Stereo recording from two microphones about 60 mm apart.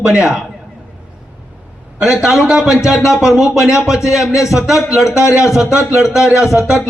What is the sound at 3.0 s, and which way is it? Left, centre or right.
Speech, left.